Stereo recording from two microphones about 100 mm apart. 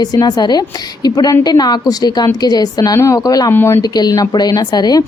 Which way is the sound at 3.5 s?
25° left (ahead or behind).